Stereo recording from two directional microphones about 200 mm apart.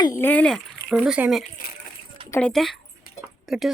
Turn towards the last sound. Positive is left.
turn(degrees=0)  # may be behind; listen again after turning